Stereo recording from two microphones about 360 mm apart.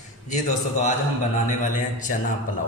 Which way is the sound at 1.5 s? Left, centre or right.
Left.